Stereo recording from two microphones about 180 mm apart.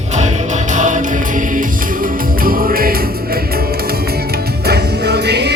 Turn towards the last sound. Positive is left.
turn(degrees=-65)  # may be behind; listen again after turning